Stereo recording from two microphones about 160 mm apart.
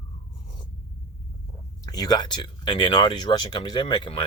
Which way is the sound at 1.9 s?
25° left (ahead or behind).